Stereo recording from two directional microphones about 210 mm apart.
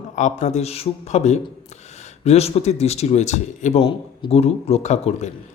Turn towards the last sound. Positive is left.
turn(degrees=35)  # may be behind; listen again after turning